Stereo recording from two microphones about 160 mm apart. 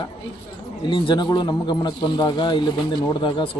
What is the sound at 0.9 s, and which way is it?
Speech, 30° left (ahead or behind).